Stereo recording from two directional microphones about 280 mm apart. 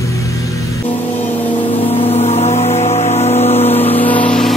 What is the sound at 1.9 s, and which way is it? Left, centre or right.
Music, left.